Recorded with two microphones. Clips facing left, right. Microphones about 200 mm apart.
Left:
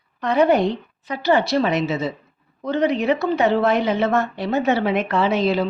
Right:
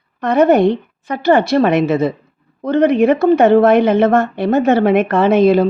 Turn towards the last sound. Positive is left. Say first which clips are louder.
# right 8 dB
turn(degrees=-50)  # may be behind; listen again after turning